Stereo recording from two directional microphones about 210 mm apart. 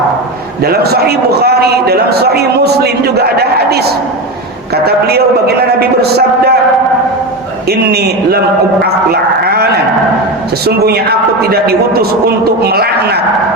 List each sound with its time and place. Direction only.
0.6 s a man's voice: 50° right (ahead or behind)
4.9 s a man's voice: 50° right (ahead or behind)
7.7 s a man's voice: 50° right (ahead or behind)
10.7 s a man's voice: 50° right (ahead or behind)